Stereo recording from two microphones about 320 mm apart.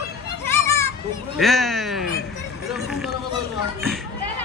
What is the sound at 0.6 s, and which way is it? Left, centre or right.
Children playing, centre.